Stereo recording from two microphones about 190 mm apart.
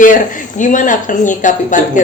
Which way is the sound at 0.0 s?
45° left (ahead or behind).